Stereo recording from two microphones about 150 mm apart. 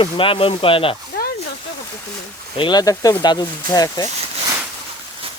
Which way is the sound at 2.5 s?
30° left (ahead or behind).